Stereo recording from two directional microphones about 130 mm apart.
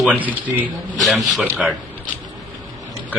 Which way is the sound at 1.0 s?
Centre (ahead or behind).